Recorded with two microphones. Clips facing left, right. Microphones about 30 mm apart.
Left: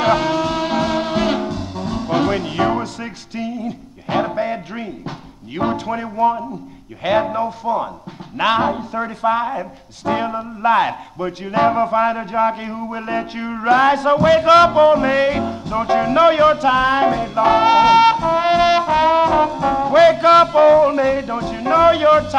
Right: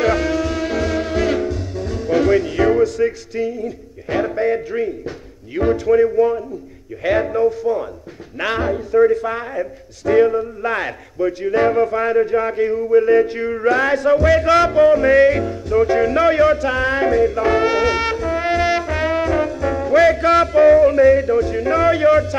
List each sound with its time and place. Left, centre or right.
0.0 s music: left
5.0 s speech: left
7.0 s music: left